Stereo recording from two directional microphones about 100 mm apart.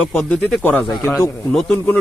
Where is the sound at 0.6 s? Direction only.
20° left (ahead or behind).